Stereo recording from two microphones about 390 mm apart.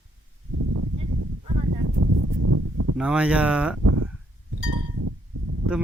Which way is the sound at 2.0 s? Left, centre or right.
Right.